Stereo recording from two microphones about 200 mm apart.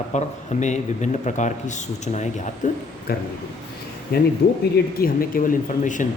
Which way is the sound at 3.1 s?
50° left (ahead or behind).